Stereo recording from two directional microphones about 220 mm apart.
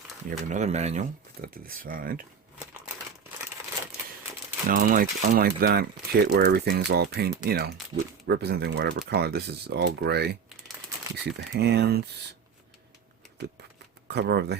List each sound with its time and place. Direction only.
0.3 s speech: 35° right (ahead or behind)
4.7 s speech: 40° right (ahead or behind)
14.1 s speech: 50° right (ahead or behind)